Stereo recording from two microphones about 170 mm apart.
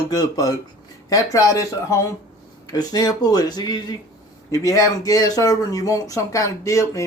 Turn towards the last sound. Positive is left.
turn(degrees=20)  # may be behind; listen again after turning